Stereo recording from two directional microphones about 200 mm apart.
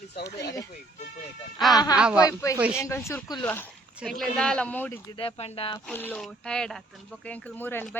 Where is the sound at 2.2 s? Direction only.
15° left (ahead or behind).